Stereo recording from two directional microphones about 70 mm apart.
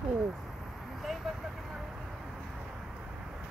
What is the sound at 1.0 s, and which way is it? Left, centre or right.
Vehicle, centre.